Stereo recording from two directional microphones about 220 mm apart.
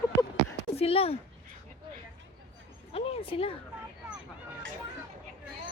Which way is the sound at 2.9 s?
25° left (ahead or behind).